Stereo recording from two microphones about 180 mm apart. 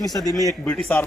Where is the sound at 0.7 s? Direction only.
5° left (ahead or behind).